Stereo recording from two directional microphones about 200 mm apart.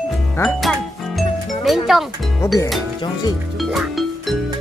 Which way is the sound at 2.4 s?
15° left (ahead or behind).